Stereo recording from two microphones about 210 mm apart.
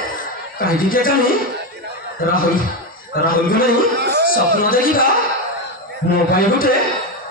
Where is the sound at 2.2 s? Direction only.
45° left (ahead or behind).